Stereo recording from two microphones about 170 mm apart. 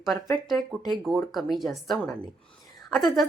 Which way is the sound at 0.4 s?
Centre (ahead or behind).